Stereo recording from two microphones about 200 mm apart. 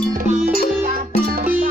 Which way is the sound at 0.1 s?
45° right (ahead or behind).